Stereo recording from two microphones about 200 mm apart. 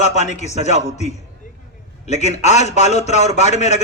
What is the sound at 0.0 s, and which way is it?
A man's voice, 35° left (ahead or behind).